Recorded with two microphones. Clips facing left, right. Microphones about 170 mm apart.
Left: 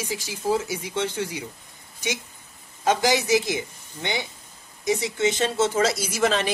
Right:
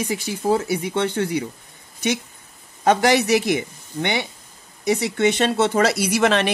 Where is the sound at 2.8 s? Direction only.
65° right (ahead or behind).